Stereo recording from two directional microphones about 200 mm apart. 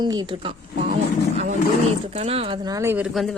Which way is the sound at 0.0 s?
20° right (ahead or behind).